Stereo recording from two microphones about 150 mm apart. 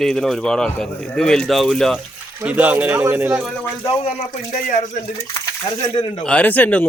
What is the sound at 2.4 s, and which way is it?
A man's voice, 10° right (ahead or behind).